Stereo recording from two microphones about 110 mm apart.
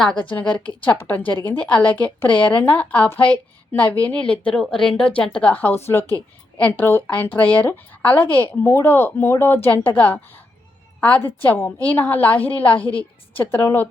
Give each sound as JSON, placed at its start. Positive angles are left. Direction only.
{"t": 0.6, "sound": "a woman's voice", "side_deg": 50}
{"t": 0.9, "sound": "a woman's voice", "side_deg": 15}